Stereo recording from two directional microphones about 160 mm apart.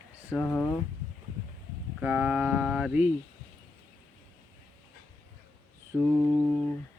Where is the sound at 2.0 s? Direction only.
10° right (ahead or behind).